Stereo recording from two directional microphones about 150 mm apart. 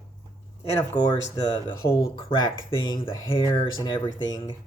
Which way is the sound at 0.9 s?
30° left (ahead or behind).